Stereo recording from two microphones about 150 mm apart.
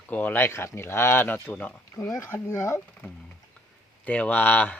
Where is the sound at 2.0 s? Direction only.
20° left (ahead or behind).